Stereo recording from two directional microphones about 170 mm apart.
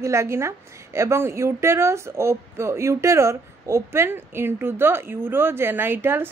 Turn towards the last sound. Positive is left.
turn(degrees=-15)  # may be behind; listen again after turning